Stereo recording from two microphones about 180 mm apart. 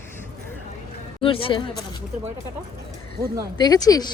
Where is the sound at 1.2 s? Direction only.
30° left (ahead or behind).